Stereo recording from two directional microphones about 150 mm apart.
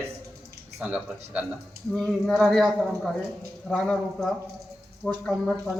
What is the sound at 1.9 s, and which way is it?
Speech, 5° left (ahead or behind).